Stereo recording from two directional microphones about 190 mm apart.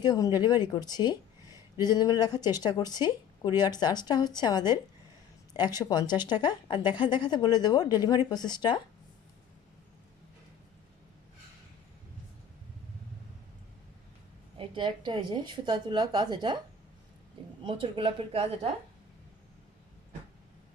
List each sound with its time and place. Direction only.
0.0 s a woman's voice: 20° left (ahead or behind)
14.6 s a woman's voice: 25° right (ahead or behind)
17.6 s a woman's voice: 25° right (ahead or behind)